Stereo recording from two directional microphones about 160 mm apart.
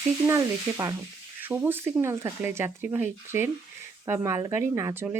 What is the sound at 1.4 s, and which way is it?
A woman's voice, 15° right (ahead or behind).